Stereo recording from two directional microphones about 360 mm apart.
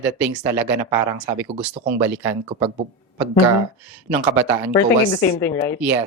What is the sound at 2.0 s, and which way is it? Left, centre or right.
Speech, centre.